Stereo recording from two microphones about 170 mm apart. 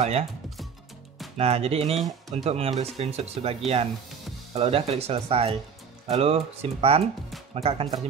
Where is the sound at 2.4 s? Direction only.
35° right (ahead or behind).